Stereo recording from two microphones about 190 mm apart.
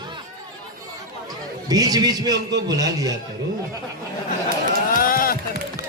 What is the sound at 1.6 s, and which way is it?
A man's voice, 20° right (ahead or behind).